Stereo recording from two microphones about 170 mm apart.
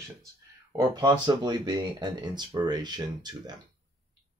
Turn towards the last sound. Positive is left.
turn(degrees=-25)  # may be behind; listen again after turning